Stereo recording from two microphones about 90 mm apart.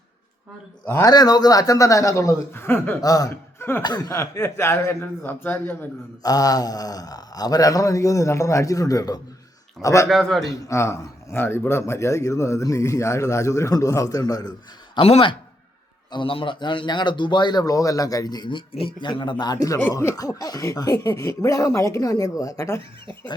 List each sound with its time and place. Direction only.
1.0 s speech: 45° left (ahead or behind); by 3.0 s 25° left (ahead or behind)
3.0 s speech: 40° left (ahead or behind)
3.6 s speech: 25° left (ahead or behind)
6.2 s speech: 45° left (ahead or behind)
10.1 s a man's voice: centre (ahead or behind)
10.4 s speech: 35° left (ahead or behind)
14.9 s a man's voice: 70° left (ahead or behind); by 19.8 s 45° left (ahead or behind)
19.8 s speech: 30° left (ahead or behind)